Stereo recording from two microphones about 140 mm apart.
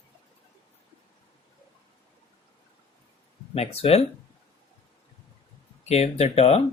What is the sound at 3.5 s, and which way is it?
Speech, 45° left (ahead or behind).